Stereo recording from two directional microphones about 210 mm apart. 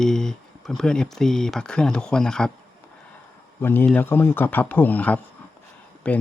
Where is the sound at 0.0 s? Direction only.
5° left (ahead or behind).